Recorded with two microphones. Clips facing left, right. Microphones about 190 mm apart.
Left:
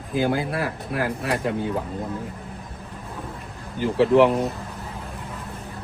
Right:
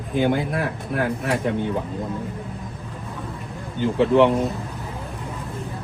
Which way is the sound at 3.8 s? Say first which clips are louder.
Even; centre (ahead or behind).